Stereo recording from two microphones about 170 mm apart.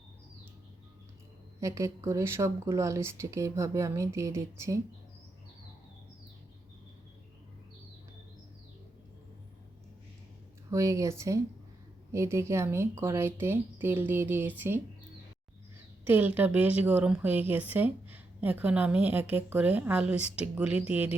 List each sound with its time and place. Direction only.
1.6 s a woman's voice: 20° right (ahead or behind)
10.7 s a woman's voice: 20° right (ahead or behind)
16.0 s a woman's voice: 10° right (ahead or behind)